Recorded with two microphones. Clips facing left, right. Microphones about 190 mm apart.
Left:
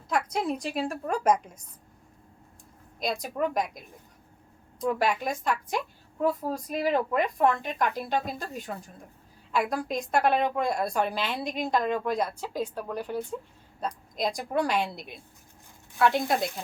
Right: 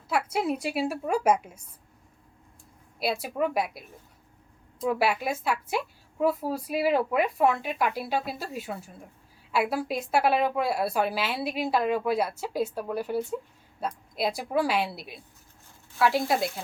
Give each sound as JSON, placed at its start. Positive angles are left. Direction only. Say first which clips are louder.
{"t": 0.1, "sound": "a woman's voice", "louder": "right 1 dB", "side_deg": -5}
{"t": 3.0, "sound": "a woman's voice", "louder": "right 1 dB", "side_deg": -5}